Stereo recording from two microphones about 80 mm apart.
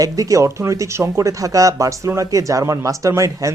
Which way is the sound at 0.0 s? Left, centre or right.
Right.